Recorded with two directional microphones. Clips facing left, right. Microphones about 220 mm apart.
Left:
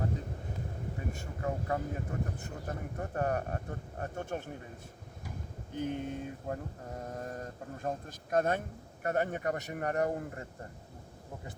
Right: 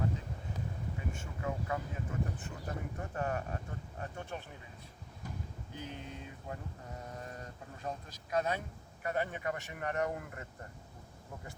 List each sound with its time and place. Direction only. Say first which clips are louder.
1.1 s speech: left 5 dB; 40° left (ahead or behind)
5.7 s speech: left 10 dB; 50° left (ahead or behind); by 10.4 s 35° left (ahead or behind)